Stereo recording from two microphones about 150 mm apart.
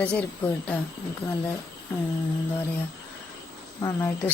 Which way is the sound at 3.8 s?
25° left (ahead or behind).